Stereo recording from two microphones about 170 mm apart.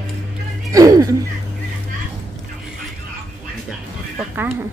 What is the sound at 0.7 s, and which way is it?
Music, 20° right (ahead or behind).